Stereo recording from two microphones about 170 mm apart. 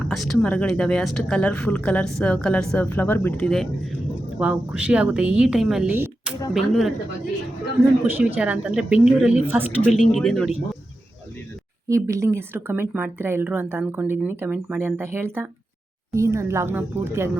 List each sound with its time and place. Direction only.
0.1 s speech: centre (ahead or behind)
4.4 s speech: 5° right (ahead or behind)
5.9 s a sound: 15° right (ahead or behind)
6.5 s speech: centre (ahead or behind)
8.0 s speech: 5° right (ahead or behind)
10.1 s speech: 5° left (ahead or behind)
11.9 s speech: 15° right (ahead or behind)